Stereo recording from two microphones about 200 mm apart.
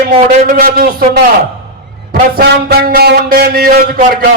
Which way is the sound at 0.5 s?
45° right (ahead or behind).